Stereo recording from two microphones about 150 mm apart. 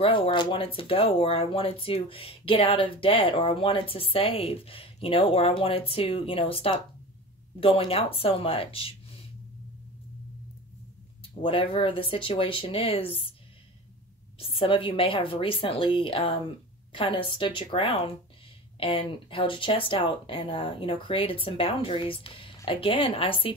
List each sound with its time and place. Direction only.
0.0 s speech: 35° left (ahead or behind)
11.4 s speech: 35° left (ahead or behind)
14.4 s speech: 35° left (ahead or behind)